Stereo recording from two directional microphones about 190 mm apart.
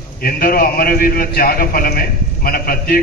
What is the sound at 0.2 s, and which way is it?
A man's voice, 50° left (ahead or behind).